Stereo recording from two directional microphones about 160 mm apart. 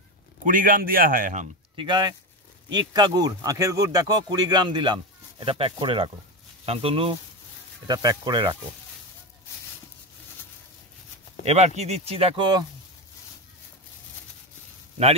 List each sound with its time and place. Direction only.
0.4 s a man's voice: 60° right (ahead or behind)
1.8 s speech: 30° right (ahead or behind)
7.8 s speech: 25° right (ahead or behind)
11.4 s speech: 45° right (ahead or behind); by 12.6 s 30° right (ahead or behind)